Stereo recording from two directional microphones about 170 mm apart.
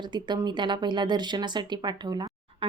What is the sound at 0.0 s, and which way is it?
Speech, 25° right (ahead or behind).